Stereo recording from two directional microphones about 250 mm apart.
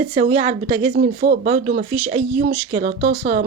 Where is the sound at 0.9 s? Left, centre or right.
Right.